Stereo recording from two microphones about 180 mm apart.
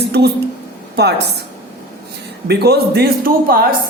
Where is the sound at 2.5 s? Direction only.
65° right (ahead or behind).